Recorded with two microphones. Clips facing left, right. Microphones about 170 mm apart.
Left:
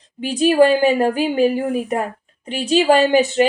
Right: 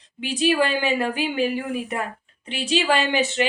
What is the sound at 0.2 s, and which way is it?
A woman's voice, 45° left (ahead or behind).